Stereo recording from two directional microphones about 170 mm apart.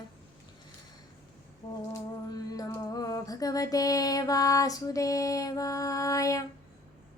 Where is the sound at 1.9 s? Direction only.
20° left (ahead or behind).